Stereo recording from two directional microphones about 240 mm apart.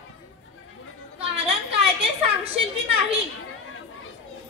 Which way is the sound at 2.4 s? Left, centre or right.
Right.